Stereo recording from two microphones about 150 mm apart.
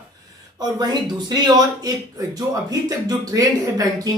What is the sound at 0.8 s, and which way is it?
Speech, 30° right (ahead or behind).